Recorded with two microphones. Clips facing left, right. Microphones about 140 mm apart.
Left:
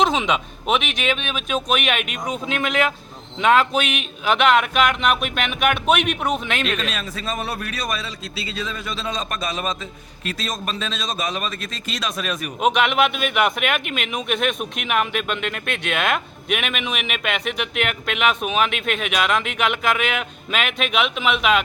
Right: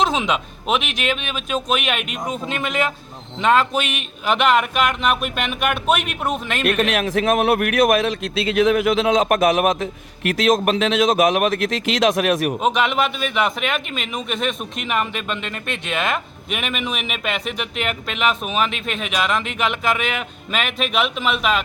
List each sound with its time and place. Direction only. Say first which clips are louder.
0.0 s speech: even; centre (ahead or behind)
6.7 s a man's voice: right 7 dB; 75° right (ahead or behind)
12.5 s speech: left 1 dB; centre (ahead or behind)